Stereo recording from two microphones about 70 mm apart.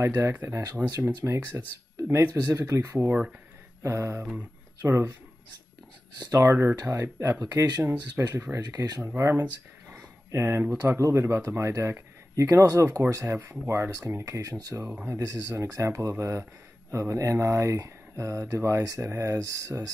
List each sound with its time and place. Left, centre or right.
0.0 s speech: right
2.0 s a sound: right
2.4 s speech: right
3.0 s speech: right
3.8 s speech: right
6.1 s speech: right
6.4 s speech: right
7.3 s speech: right
8.2 s speech: right
8.5 s speech: right
9.0 s speech: right
11.0 s speech: right